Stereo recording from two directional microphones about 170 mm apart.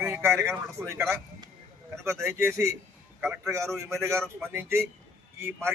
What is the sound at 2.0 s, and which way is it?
A man's voice, 15° right (ahead or behind).